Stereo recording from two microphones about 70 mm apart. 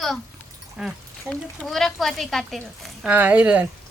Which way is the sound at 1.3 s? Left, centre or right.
Centre.